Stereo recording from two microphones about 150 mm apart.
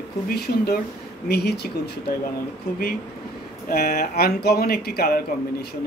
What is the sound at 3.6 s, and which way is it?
Speech, 90° left.